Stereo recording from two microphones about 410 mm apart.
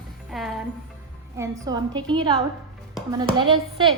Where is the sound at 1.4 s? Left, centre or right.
Centre.